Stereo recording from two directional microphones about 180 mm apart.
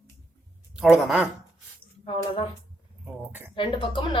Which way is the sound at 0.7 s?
5° right (ahead or behind).